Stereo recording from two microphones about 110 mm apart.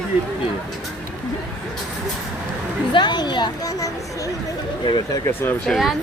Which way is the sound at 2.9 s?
45° left (ahead or behind).